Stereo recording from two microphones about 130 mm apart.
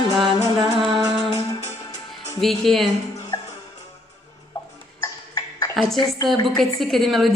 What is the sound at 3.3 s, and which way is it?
Music, 25° left (ahead or behind).